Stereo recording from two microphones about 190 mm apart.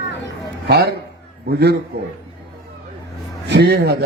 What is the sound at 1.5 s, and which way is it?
Speech, 60° right (ahead or behind).